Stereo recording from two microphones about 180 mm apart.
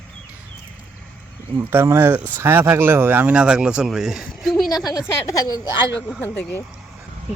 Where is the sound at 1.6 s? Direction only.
10° right (ahead or behind).